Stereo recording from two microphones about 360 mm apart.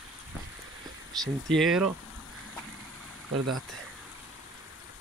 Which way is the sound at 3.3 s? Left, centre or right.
Right.